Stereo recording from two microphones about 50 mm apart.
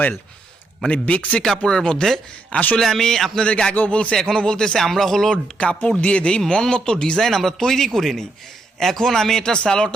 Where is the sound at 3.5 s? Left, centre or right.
Centre.